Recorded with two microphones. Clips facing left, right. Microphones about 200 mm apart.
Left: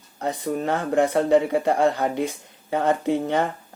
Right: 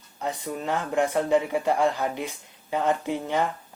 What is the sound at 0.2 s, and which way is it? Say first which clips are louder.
Speech: left 5 dB; 55° left (ahead or behind).